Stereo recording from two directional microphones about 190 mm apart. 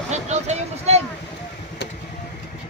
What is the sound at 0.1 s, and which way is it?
Vehicle, 35° right (ahead or behind).